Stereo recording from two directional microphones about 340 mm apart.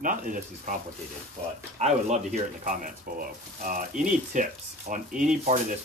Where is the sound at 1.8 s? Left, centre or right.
Right.